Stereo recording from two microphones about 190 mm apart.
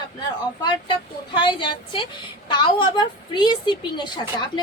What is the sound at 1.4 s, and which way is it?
A woman's voice, 25° left (ahead or behind).